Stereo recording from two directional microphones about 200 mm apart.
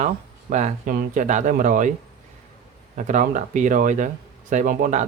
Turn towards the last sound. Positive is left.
turn(degrees=-40)  # may be behind; listen again after turning